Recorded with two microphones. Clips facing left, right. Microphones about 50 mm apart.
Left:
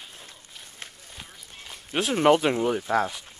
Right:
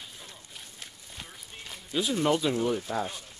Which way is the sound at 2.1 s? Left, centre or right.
Left.